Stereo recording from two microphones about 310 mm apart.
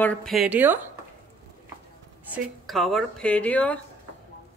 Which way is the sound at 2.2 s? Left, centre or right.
Centre.